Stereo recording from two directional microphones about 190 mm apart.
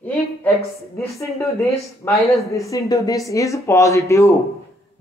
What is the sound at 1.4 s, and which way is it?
Speech, 15° left (ahead or behind).